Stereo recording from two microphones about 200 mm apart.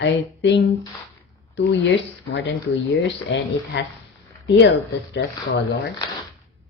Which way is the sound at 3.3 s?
65° left (ahead or behind).